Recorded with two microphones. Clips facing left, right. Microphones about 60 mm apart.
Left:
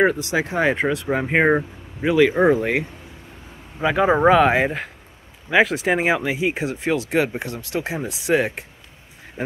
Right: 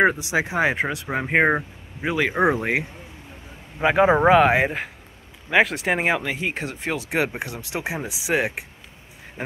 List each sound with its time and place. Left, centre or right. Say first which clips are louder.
0.0 s speech: left 1 dB; centre
3.8 s speech: right 1 dB; right
4.2 s speech: left 1 dB; centre